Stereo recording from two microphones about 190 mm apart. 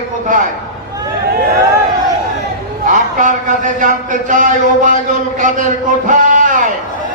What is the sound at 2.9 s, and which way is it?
Speech, 40° right (ahead or behind).